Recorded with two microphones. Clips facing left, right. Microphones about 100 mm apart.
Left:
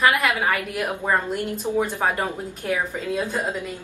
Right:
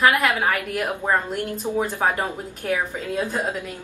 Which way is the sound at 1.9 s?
15° right (ahead or behind).